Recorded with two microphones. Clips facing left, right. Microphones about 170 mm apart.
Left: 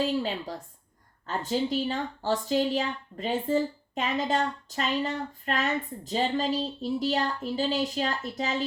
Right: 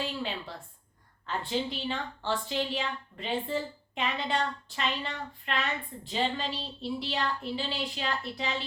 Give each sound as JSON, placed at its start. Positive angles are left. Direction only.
{"t": 0.0, "sound": "speech", "side_deg": 40}